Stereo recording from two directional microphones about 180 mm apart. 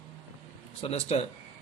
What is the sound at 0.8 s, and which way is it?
Speech, 35° left (ahead or behind).